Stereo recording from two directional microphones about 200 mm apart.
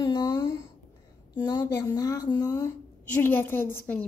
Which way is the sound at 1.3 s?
20° left (ahead or behind).